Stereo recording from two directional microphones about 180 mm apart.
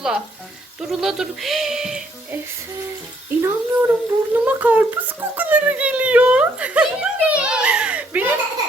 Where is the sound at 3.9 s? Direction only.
10° right (ahead or behind).